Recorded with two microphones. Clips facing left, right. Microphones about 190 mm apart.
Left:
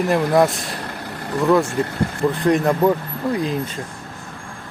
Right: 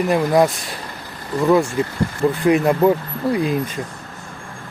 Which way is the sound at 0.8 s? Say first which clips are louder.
Left 4 dB; 70° left (ahead or behind).